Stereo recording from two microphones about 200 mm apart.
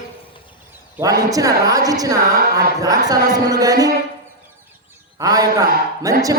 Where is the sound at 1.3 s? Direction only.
15° right (ahead or behind).